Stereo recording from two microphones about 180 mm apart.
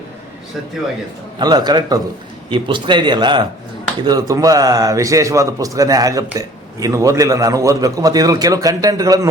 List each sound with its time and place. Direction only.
1.4 s a man's voice: 20° right (ahead or behind)